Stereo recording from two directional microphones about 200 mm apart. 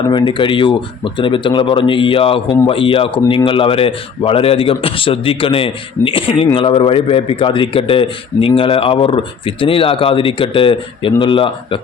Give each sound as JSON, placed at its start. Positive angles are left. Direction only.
{"t": 0.1, "sound": "speech", "side_deg": 25}